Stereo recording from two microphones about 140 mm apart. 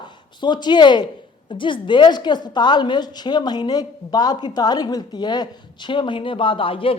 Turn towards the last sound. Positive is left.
turn(degrees=40)  # may be behind; listen again after turning